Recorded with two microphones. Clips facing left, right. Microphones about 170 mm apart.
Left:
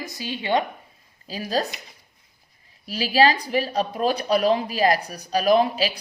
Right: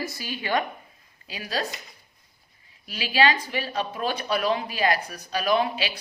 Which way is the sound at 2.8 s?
35° left (ahead or behind).